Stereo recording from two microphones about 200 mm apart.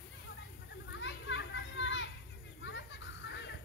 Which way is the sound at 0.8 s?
65° left (ahead or behind).